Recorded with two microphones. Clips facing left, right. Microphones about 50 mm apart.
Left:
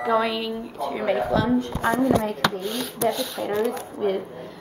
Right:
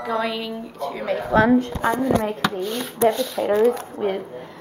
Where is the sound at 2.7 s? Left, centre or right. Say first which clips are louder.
Right 5 dB; centre.